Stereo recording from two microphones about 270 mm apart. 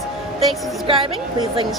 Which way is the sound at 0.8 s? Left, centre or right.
Centre.